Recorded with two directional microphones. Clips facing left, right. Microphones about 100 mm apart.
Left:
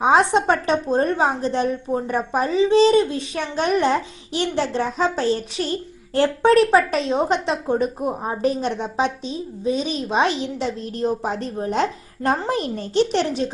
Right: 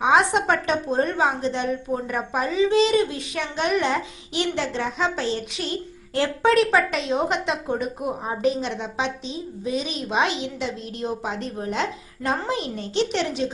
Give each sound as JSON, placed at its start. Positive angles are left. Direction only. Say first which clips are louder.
{"t": 0.0, "sound": "a woman's voice", "louder": "left 3 dB", "side_deg": 35}